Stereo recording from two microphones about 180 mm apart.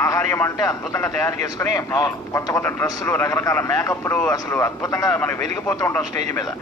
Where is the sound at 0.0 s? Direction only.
15° left (ahead or behind).